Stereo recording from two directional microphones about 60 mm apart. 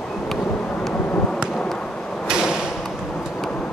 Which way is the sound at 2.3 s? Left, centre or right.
Centre.